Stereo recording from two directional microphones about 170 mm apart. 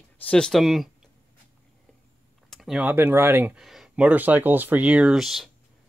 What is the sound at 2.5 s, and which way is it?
Speech, centre (ahead or behind).